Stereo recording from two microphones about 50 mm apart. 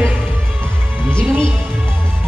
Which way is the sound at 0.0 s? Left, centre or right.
Right.